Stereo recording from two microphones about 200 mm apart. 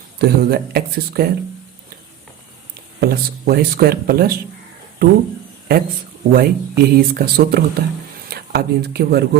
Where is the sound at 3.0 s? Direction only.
50° right (ahead or behind).